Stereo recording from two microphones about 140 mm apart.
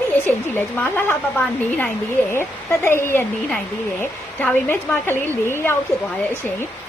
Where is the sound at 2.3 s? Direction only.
15° left (ahead or behind).